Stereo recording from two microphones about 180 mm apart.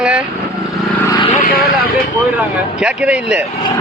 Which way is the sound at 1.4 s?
55° left (ahead or behind).